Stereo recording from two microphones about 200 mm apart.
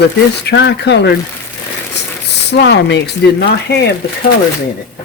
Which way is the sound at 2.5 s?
60° left (ahead or behind).